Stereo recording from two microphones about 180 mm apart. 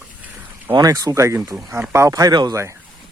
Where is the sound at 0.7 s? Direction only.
20° right (ahead or behind).